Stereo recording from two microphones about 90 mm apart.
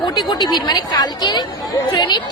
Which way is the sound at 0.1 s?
55° left (ahead or behind).